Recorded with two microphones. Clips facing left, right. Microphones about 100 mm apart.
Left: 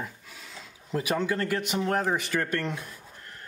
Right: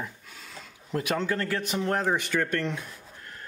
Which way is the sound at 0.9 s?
5° left (ahead or behind).